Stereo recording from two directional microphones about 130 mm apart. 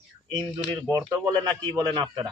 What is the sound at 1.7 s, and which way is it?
Speech, 25° right (ahead or behind).